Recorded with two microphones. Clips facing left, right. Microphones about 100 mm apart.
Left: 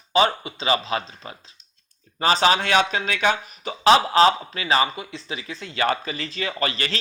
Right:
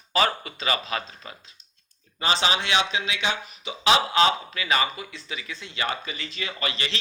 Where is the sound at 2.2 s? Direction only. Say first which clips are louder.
Left 6 dB; 40° left (ahead or behind).